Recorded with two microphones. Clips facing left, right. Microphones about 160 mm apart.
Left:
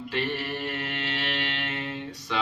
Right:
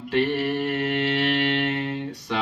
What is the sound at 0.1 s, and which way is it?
Mantra, 60° right (ahead or behind).